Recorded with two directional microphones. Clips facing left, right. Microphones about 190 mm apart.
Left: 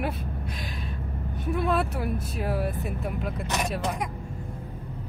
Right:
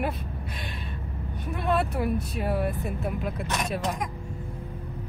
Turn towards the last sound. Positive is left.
turn(degrees=0)  # may be behind; listen again after turning